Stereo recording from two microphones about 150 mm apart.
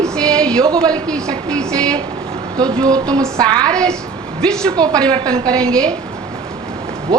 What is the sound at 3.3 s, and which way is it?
Speech, 25° right (ahead or behind).